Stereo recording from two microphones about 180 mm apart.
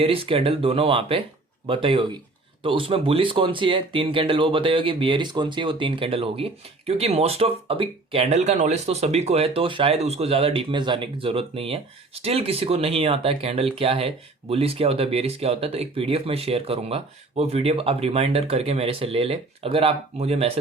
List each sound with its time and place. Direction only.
0.0 s speech: 30° right (ahead or behind)